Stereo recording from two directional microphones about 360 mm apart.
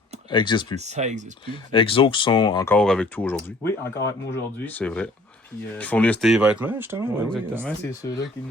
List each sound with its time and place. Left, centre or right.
0.3 s speech: centre
0.8 s speech: centre
1.5 s speech: centre